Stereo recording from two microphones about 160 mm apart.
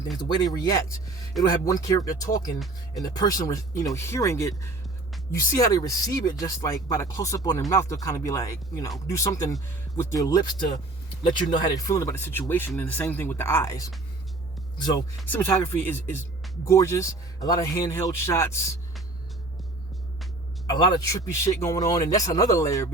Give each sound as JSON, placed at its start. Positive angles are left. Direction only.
{"t": 0.2, "sound": "a man's voice", "side_deg": 25}
{"t": 15.3, "sound": "speech", "side_deg": 15}
{"t": 20.7, "sound": "a man's voice", "side_deg": 25}